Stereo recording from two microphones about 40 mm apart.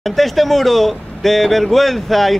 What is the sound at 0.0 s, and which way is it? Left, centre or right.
A man's voice, centre.